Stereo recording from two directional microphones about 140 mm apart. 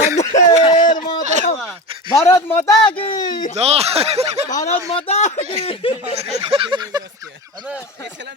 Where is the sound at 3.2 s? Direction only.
30° left (ahead or behind).